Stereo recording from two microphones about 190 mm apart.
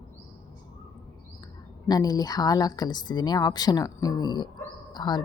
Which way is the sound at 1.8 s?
20° left (ahead or behind).